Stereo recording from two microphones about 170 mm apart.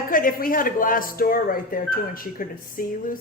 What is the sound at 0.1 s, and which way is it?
Speech, 55° left (ahead or behind).